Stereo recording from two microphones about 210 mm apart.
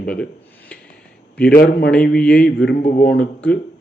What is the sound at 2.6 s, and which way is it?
Speech, 50° left (ahead or behind).